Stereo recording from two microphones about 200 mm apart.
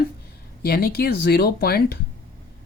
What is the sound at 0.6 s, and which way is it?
A woman's voice, 50° left (ahead or behind).